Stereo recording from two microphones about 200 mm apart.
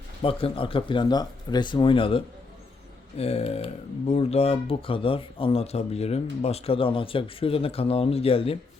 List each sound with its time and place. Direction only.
0.2 s speech: 25° left (ahead or behind)